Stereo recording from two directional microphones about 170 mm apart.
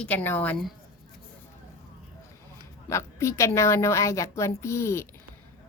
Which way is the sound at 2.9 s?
15° left (ahead or behind).